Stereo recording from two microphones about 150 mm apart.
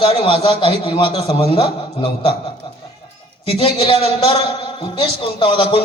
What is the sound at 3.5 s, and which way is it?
A man's voice, 40° left (ahead or behind).